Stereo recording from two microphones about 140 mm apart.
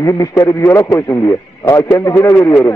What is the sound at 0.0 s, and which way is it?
Speech, 25° left (ahead or behind).